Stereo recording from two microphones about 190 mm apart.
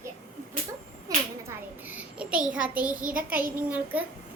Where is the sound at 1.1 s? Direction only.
20° right (ahead or behind).